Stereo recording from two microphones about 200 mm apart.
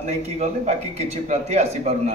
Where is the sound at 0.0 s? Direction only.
35° right (ahead or behind).